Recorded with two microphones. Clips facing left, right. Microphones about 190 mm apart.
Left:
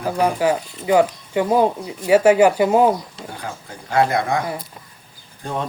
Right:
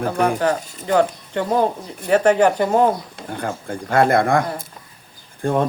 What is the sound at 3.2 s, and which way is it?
Speech, 55° right (ahead or behind).